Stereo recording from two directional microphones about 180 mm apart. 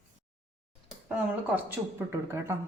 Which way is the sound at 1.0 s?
10° right (ahead or behind).